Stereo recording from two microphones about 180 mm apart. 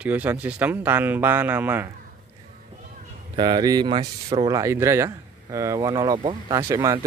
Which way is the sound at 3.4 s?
25° right (ahead or behind).